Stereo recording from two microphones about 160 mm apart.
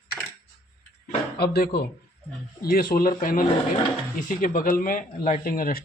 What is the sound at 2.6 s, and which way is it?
Speech, 65° left (ahead or behind).